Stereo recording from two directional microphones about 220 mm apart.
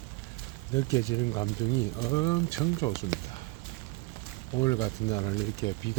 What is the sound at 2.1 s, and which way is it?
Speech, 20° left (ahead or behind).